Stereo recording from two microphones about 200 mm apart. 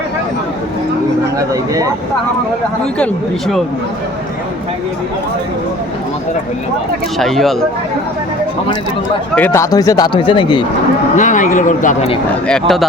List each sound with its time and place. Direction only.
1.4 s speech: 15° right (ahead or behind)
3.0 s speech: centre (ahead or behind)
7.2 s speech: centre (ahead or behind)
9.3 s a man's voice: 10° left (ahead or behind)
11.2 s speech: 40° left (ahead or behind)
12.5 s speech: centre (ahead or behind)